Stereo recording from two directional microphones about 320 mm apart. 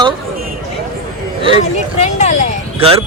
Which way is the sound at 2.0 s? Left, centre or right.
Left.